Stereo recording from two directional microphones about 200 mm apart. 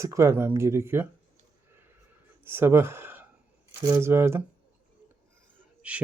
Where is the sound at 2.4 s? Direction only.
10° right (ahead or behind).